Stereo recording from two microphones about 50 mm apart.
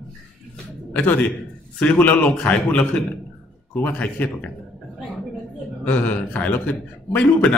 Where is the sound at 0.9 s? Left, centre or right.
Left.